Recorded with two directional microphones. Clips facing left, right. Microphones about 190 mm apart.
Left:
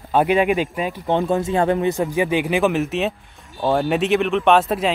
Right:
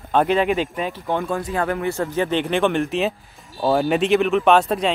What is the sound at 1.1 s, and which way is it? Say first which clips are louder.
Speech: left 5 dB; 20° left (ahead or behind).